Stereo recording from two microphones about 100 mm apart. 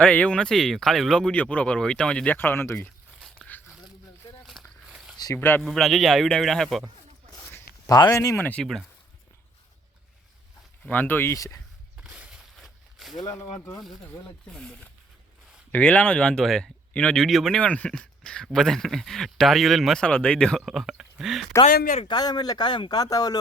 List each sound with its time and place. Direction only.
0.0 s speech: 10° left (ahead or behind)
3.3 s biting: 15° left (ahead or behind)
4.6 s walk: 5° left (ahead or behind)
4.9 s zipper: 5° right (ahead or behind)
5.3 s speech: 20° left (ahead or behind)
5.6 s speech: centre (ahead or behind)
7.9 s speech: 40° left (ahead or behind)
8.4 s speech: 15° left (ahead or behind)
10.8 s speech: 15° left (ahead or behind); by 11.6 s 35° left (ahead or behind)
11.9 s a sound: 10° right (ahead or behind)
14.4 s speech: 5° left (ahead or behind)
20.7 s a sound: 5° right (ahead or behind)
21.6 s speech: 75° left (ahead or behind)
22.1 s speech: 45° left (ahead or behind)